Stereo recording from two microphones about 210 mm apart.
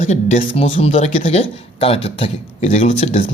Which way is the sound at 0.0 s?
35° left (ahead or behind).